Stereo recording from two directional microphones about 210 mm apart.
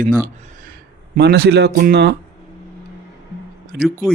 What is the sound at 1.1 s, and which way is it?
Speech, 50° right (ahead or behind).